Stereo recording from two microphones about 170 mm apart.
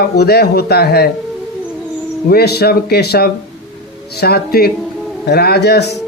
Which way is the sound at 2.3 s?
70° left (ahead or behind).